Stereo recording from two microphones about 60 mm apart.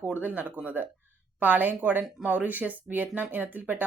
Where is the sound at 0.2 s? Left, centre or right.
Right.